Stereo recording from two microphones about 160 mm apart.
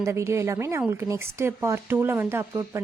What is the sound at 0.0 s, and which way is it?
A woman's voice, 15° right (ahead or behind).